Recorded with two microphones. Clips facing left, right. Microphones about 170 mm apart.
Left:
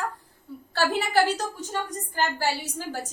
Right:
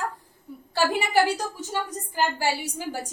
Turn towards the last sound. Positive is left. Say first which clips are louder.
# right 1 dB
turn(degrees=-15)  # may be behind; listen again after turning